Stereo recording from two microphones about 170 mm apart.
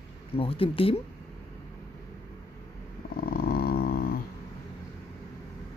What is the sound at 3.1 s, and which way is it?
Dog, 60° left (ahead or behind).